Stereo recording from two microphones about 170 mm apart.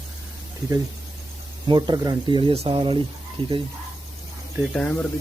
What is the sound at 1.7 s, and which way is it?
Speech, 25° right (ahead or behind).